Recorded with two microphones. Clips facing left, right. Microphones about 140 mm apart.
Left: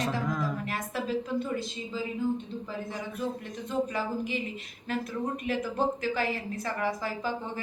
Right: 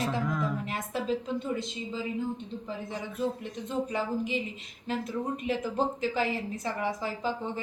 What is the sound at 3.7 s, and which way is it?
Speech, 20° right (ahead or behind).